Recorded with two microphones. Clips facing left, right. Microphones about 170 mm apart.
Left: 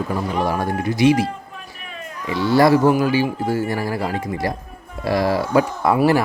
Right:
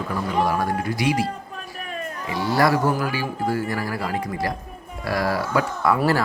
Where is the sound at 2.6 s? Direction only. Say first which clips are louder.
Left 6 dB; 20° left (ahead or behind).